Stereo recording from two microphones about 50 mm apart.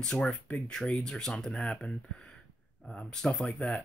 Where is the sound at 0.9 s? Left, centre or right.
Centre.